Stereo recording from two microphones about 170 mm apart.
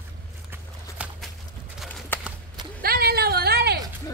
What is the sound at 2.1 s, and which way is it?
Horse, 10° left (ahead or behind).